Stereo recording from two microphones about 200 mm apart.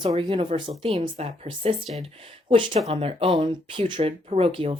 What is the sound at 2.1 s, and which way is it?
Speech, 25° right (ahead or behind).